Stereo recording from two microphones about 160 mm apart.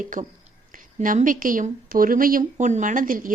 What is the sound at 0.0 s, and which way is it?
Speech, 55° right (ahead or behind).